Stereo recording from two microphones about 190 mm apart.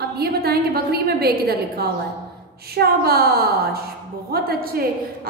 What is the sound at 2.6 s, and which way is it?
A woman's voice, 55° right (ahead or behind).